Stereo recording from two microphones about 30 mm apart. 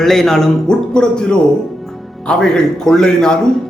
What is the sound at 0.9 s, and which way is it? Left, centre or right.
Speech, left.